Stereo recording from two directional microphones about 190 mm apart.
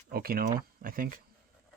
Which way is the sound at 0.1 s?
50° right (ahead or behind).